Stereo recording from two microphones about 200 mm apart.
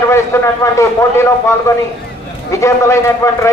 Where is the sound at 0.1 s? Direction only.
15° left (ahead or behind).